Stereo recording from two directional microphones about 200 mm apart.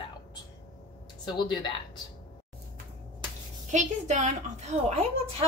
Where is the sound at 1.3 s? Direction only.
20° left (ahead or behind).